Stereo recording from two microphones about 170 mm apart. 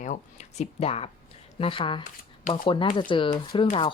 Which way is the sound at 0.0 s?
45° left (ahead or behind).